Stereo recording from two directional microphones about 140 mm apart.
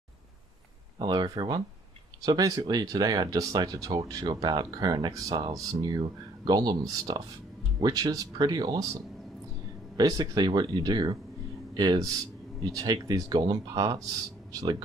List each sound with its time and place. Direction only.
0.9 s speech: 30° right (ahead or behind)
9.9 s speech: 30° right (ahead or behind)